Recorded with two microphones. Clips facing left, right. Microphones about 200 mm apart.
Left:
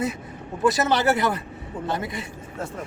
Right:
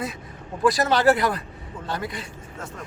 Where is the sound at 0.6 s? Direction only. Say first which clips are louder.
Right 2 dB; 25° left (ahead or behind).